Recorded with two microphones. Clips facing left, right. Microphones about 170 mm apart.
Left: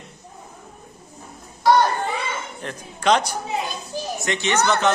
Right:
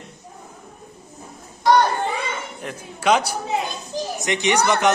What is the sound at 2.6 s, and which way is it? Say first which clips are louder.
A child's voice: right 1 dB; 10° right (ahead or behind).